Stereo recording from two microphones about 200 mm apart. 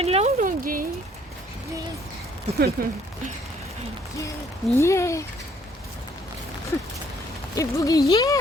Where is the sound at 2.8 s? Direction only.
50° right (ahead or behind).